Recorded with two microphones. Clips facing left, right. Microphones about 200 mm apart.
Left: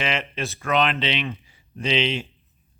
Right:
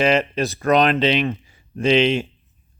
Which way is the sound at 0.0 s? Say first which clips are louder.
Right 9 dB; 40° right (ahead or behind).